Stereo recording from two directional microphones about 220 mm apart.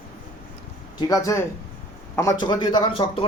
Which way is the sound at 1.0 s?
15° left (ahead or behind).